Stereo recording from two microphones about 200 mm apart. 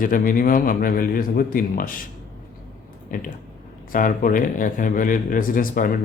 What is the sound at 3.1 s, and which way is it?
A man's voice, 40° left (ahead or behind).